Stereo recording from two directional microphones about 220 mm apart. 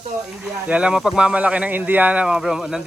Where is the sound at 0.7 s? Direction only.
5° right (ahead or behind).